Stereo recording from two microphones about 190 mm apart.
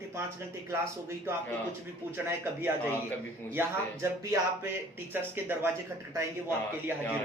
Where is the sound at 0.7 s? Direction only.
15° right (ahead or behind).